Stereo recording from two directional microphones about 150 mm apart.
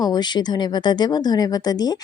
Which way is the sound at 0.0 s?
30° left (ahead or behind).